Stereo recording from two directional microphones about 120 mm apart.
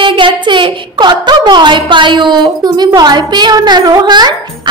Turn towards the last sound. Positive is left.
turn(degrees=-35)  # may be behind; listen again after turning